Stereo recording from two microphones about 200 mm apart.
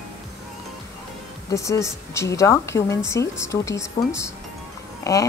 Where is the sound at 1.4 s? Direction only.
15° left (ahead or behind).